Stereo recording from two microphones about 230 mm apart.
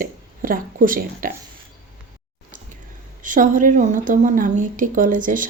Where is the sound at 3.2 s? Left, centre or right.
Right.